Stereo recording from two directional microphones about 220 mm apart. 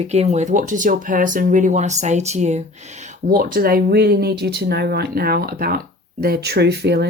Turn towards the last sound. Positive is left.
turn(degrees=-50)  # may be behind; listen again after turning